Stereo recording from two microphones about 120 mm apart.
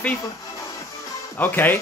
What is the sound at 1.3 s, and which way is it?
Speech, 15° left (ahead or behind).